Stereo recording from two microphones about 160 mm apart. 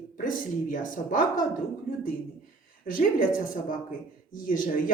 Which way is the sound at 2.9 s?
60° left (ahead or behind).